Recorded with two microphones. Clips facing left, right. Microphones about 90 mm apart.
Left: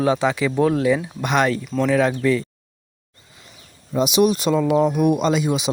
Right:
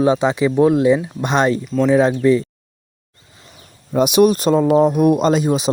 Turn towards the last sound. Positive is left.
turn(degrees=-40)  # may be behind; listen again after turning